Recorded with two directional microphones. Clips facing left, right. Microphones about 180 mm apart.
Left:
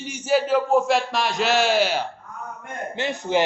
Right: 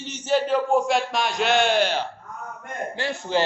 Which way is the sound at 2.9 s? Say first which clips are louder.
Left 2 dB; 20° left (ahead or behind).